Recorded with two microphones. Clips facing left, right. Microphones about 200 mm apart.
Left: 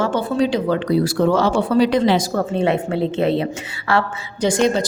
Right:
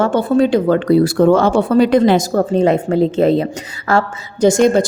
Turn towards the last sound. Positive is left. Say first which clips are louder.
# right 6 dB
turn(degrees=-50)  # may be behind; listen again after turning